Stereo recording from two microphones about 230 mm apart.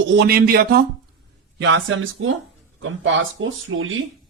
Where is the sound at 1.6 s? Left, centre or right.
Right.